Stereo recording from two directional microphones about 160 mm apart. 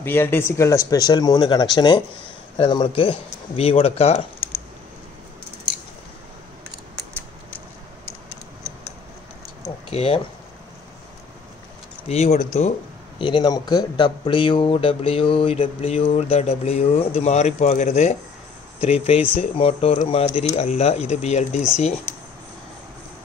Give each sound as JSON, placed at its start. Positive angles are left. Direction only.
{"t": 0.0, "sound": "speech", "side_deg": 15}
{"t": 9.8, "sound": "speech", "side_deg": 35}
{"t": 12.1, "sound": "speech", "side_deg": 40}
{"t": 13.2, "sound": "speech", "side_deg": 25}